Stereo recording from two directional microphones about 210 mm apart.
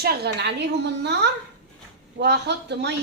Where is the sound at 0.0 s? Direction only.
50° right (ahead or behind).